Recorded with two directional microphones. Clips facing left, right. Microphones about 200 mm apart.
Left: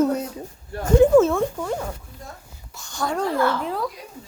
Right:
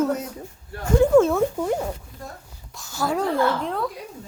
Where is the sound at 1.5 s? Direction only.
15° right (ahead or behind).